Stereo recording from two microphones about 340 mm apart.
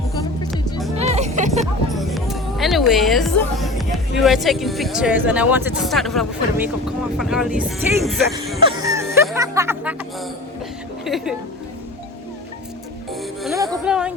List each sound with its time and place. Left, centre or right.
0.9 s music: centre
2.0 s music: centre
4.2 s speech: centre
8.6 s music: centre
11.0 s speech: centre
13.6 s speech: centre